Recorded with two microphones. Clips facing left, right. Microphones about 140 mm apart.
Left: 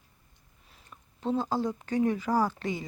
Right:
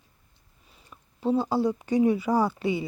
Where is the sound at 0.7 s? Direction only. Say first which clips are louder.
Right 1 dB; 5° right (ahead or behind).